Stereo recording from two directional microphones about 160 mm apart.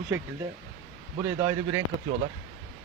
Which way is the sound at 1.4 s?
20° right (ahead or behind).